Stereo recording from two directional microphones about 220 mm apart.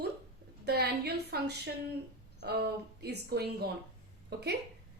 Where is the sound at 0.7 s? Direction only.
45° right (ahead or behind).